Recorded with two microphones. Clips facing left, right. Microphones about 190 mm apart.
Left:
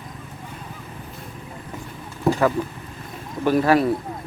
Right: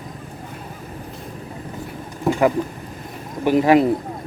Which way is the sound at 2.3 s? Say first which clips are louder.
Right 2 dB; 20° right (ahead or behind).